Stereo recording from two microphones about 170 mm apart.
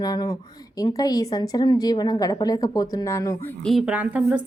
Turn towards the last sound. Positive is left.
turn(degrees=-10)  # may be behind; listen again after turning